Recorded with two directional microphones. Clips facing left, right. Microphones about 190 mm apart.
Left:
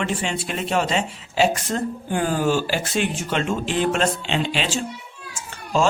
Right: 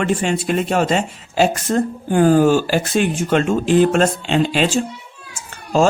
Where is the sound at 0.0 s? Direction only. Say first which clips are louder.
Right 6 dB; 50° right (ahead or behind).